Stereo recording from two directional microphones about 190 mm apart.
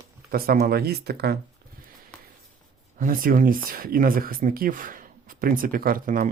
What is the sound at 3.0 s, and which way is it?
Speech, 45° right (ahead or behind).